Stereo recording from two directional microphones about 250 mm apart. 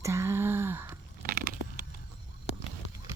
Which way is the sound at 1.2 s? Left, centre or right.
Right.